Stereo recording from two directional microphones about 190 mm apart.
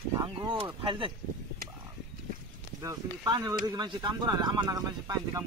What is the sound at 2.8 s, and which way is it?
Speech, 20° right (ahead or behind).